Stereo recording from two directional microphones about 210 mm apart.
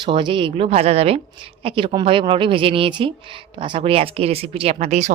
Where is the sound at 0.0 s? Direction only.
20° right (ahead or behind).